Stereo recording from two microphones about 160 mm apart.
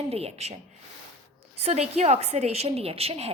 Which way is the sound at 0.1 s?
40° right (ahead or behind).